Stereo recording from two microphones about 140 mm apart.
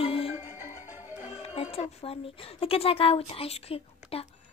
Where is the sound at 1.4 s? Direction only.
45° left (ahead or behind).